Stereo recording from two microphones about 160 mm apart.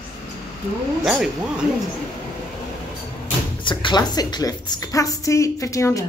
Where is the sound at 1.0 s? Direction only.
5° right (ahead or behind).